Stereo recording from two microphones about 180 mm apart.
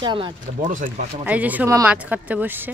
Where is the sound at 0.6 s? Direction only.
45° right (ahead or behind).